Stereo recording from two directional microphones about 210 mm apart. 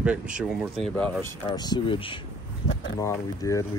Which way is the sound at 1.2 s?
20° left (ahead or behind).